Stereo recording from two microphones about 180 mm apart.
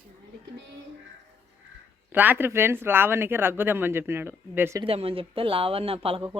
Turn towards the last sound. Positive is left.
turn(degrees=-30)  # may be behind; listen again after turning